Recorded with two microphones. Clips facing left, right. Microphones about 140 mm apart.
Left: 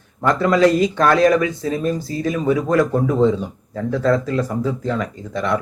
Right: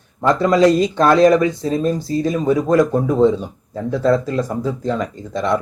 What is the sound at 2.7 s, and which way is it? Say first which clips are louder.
Speech: right 2 dB; 15° right (ahead or behind).